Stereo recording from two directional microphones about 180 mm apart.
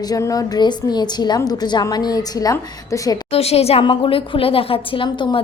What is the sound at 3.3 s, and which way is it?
A woman's voice, 35° left (ahead or behind).